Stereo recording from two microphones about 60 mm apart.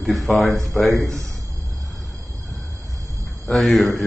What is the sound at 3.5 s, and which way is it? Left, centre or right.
Speech, centre.